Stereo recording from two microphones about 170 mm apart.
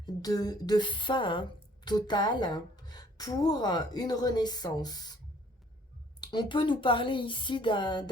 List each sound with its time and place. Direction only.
0.0 s a woman's voice: 20° left (ahead or behind)
6.1 s a woman's voice: 25° left (ahead or behind)